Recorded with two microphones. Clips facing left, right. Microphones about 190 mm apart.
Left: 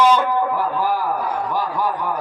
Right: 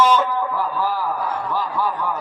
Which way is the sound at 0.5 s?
15° left (ahead or behind).